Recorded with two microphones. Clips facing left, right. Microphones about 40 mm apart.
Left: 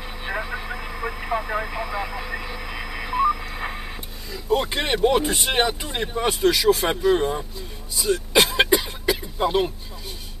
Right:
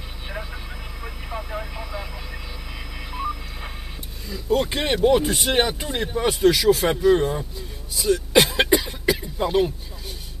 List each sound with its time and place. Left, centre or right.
0.2 s vehicle: left
4.3 s speech: centre
8.4 s cough: centre
9.4 s speech: centre